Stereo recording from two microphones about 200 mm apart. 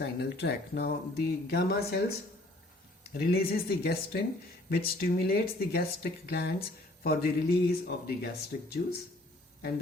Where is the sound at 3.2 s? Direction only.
50° left (ahead or behind).